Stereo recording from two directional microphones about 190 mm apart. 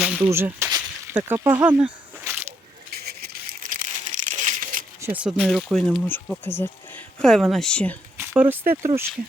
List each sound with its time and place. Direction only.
0.0 s speech: 10° right (ahead or behind)
2.9 s crumpling: 55° right (ahead or behind)
4.9 s speech: 10° right (ahead or behind); by 7.9 s 5° left (ahead or behind)
8.2 s speech: 10° right (ahead or behind)